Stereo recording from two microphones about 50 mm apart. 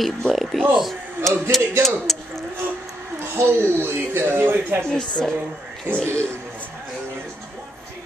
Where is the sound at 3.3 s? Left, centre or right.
Right.